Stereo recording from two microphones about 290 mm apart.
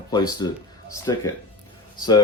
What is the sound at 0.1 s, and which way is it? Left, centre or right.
Speech, centre.